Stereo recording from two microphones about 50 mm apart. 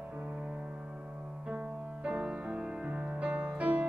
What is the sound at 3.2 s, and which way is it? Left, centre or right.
Music, right.